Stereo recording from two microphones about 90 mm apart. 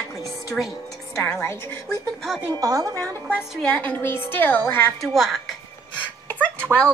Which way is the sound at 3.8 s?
20° left (ahead or behind).